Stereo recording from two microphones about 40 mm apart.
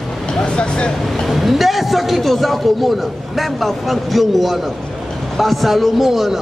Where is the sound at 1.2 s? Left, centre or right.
Centre.